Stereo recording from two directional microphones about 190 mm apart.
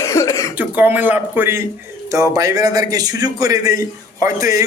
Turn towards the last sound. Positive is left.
turn(degrees=-20)  # may be behind; listen again after turning